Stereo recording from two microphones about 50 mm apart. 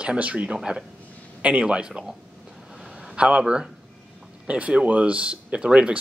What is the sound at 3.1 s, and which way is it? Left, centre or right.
Speech, right.